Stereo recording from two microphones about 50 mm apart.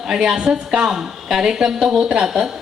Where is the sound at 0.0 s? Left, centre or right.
Centre.